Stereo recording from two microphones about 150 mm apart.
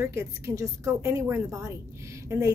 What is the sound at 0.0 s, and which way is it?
Speech, 20° right (ahead or behind).